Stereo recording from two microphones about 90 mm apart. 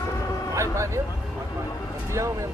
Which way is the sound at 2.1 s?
35° right (ahead or behind).